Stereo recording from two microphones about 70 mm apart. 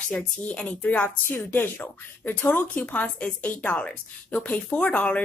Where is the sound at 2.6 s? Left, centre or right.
Centre.